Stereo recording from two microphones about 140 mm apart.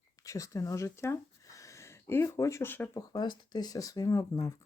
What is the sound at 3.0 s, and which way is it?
Speech, 30° left (ahead or behind).